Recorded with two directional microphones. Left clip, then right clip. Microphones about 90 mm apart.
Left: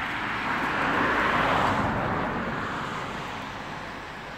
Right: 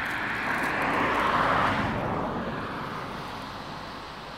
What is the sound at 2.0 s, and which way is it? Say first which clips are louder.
Vehicle: left 2 dB; 35° right (ahead or behind).